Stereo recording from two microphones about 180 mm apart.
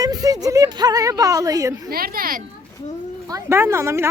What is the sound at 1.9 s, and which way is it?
Speech, 55° right (ahead or behind).